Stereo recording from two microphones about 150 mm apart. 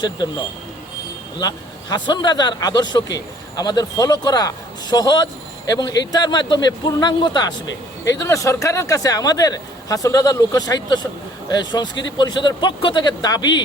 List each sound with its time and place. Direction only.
0.0 s a man's voice: 25° left (ahead or behind)